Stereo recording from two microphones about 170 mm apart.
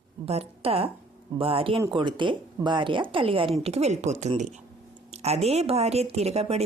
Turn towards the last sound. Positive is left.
turn(degrees=-40)  # may be behind; listen again after turning